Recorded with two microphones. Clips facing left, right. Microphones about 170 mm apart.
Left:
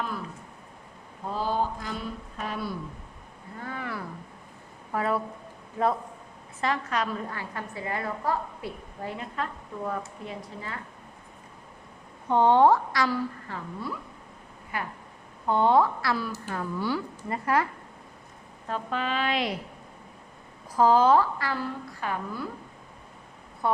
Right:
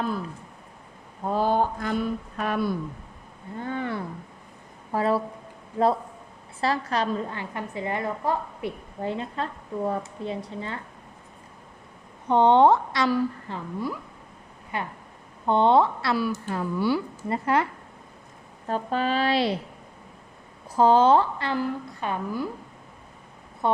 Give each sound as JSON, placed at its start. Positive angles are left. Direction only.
{"t": 1.3, "sound": "speech", "side_deg": -55}
{"t": 3.6, "sound": "a woman's voice", "side_deg": -30}
{"t": 6.6, "sound": "a woman's voice", "side_deg": -35}
{"t": 12.3, "sound": "a woman's voice", "side_deg": -20}
{"t": 16.5, "sound": "speech", "side_deg": -15}
{"t": 17.2, "sound": "a woman's voice", "side_deg": -25}
{"t": 18.7, "sound": "speech", "side_deg": -35}
{"t": 20.7, "sound": "a woman's voice", "side_deg": -25}
{"t": 23.6, "sound": "a woman's voice", "side_deg": -25}